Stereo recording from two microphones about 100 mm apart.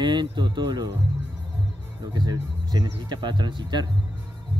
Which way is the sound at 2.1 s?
45° right (ahead or behind).